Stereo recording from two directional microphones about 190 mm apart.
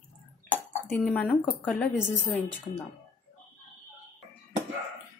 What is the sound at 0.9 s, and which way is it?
A woman's voice, 5° left (ahead or behind).